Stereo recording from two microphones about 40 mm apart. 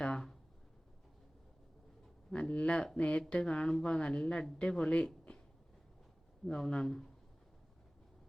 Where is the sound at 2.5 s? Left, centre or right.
Left.